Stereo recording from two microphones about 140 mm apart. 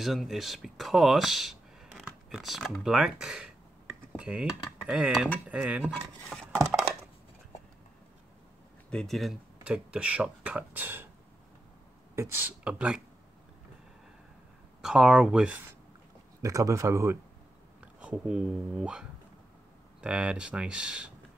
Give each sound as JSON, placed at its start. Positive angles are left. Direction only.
{"t": 0.0, "sound": "speech", "side_deg": 0}
{"t": 8.9, "sound": "speech", "side_deg": 0}
{"t": 12.2, "sound": "speech", "side_deg": -15}
{"t": 14.8, "sound": "speech", "side_deg": -5}
{"t": 16.4, "sound": "speech", "side_deg": -25}
{"t": 17.7, "sound": "speech", "side_deg": -10}